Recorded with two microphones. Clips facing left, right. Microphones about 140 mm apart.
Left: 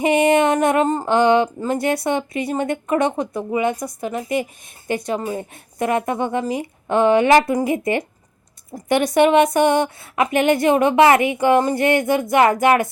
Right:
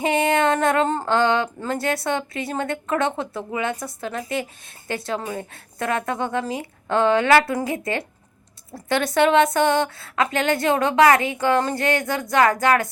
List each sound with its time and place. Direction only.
0.0 s a woman's voice: 20° left (ahead or behind)